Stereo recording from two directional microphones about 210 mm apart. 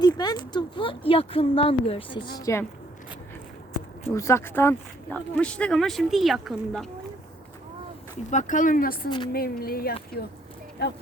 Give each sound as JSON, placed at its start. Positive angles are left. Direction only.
{"t": 0.0, "sound": "speech", "side_deg": 20}
{"t": 2.4, "sound": "speech", "side_deg": 15}
{"t": 4.1, "sound": "speech", "side_deg": 15}
{"t": 8.3, "sound": "speech", "side_deg": 35}
{"t": 9.0, "sound": "speech", "side_deg": 20}
{"t": 9.3, "sound": "speech", "side_deg": 45}